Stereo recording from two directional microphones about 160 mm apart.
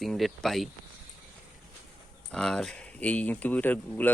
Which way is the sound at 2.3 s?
5° left (ahead or behind).